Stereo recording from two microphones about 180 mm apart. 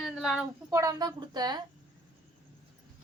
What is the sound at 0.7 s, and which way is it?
Speech, 15° right (ahead or behind).